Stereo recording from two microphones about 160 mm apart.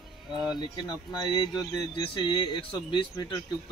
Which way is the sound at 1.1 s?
25° left (ahead or behind).